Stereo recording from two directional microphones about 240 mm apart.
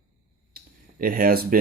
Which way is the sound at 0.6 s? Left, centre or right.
Right.